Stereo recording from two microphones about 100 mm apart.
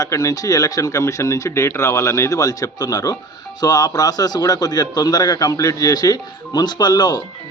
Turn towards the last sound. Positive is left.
turn(degrees=45)  # may be behind; listen again after turning